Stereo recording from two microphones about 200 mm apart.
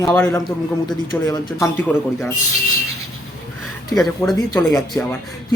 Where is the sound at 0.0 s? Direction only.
10° left (ahead or behind).